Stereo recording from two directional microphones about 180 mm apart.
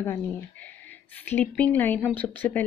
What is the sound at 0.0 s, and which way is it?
A woman's voice, 10° left (ahead or behind).